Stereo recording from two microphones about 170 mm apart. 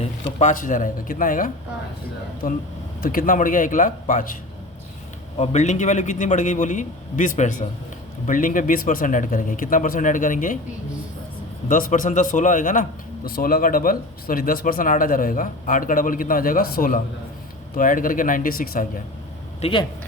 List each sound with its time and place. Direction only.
0.0 s a man's voice: 40° left (ahead or behind)
3.0 s a man's voice: 55° left (ahead or behind)
5.4 s a man's voice: 40° left (ahead or behind)
11.7 s a man's voice: 50° left (ahead or behind)
13.2 s a man's voice: 60° left (ahead or behind)
19.6 s speech: 35° left (ahead or behind)